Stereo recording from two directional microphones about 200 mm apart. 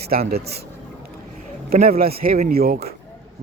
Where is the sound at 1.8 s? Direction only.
50° right (ahead or behind).